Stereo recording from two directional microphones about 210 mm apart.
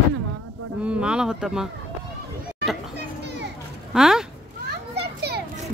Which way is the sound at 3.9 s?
Centre (ahead or behind).